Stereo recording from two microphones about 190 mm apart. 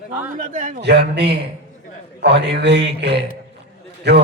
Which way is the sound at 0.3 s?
45° right (ahead or behind).